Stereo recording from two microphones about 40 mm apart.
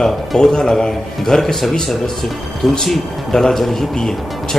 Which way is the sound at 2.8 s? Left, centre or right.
Centre.